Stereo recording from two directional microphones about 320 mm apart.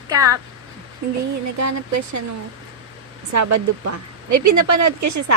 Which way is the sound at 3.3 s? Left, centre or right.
Right.